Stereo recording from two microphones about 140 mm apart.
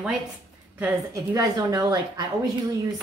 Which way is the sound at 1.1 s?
25° right (ahead or behind).